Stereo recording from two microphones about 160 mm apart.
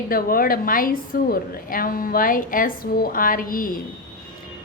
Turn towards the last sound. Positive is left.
turn(degrees=60)  # may be behind; listen again after turning